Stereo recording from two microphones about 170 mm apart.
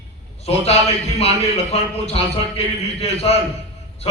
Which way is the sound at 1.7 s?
35° left (ahead or behind).